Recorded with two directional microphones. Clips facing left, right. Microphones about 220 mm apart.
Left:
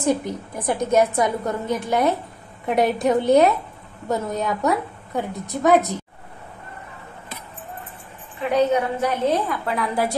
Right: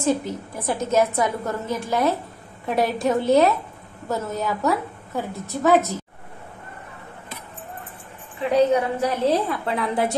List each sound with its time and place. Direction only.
0.6 s a woman's voice: 15° left (ahead or behind)
8.5 s a woman's voice: 30° right (ahead or behind)